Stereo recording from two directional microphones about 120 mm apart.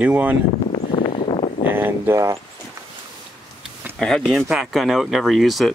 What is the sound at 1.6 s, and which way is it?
Speech, 15° right (ahead or behind).